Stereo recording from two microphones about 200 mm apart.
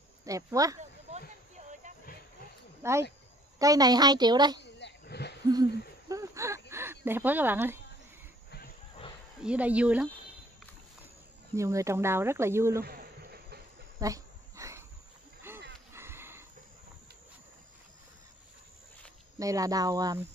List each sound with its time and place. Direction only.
0.2 s speech: 15° right (ahead or behind)
2.8 s a woman's voice: 15° right (ahead or behind)
4.6 s a sound: 60° left (ahead or behind)
5.5 s hoot: 20° right (ahead or behind)
6.7 s speech: 10° right (ahead or behind)
9.4 s speech: 5° right (ahead or behind)
11.5 s speech: 15° right (ahead or behind)
12.8 s a sound: 50° right (ahead or behind)
13.9 s dog: 15° right (ahead or behind)
15.5 s a sound: 10° right (ahead or behind)
19.3 s speech: 15° right (ahead or behind)